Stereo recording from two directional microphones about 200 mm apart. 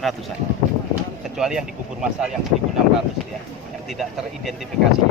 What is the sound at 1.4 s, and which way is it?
Speech, 5° right (ahead or behind).